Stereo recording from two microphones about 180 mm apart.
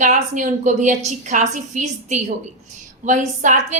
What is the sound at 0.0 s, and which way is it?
A woman's voice, 45° right (ahead or behind).